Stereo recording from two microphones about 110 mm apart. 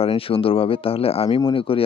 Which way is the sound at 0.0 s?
60° left (ahead or behind).